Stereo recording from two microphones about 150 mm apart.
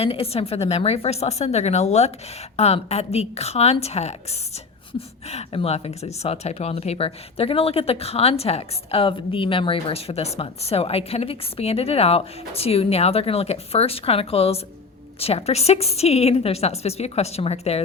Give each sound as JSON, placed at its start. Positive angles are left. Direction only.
{"t": 0.0, "sound": "a woman's voice", "side_deg": 40}